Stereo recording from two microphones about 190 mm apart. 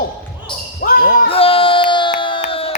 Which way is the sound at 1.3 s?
30° left (ahead or behind).